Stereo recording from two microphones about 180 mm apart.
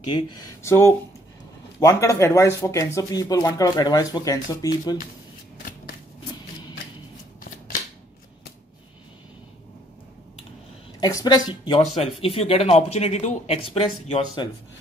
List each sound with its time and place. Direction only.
0.0 s speech: 25° left (ahead or behind)
11.0 s speech: 20° left (ahead or behind)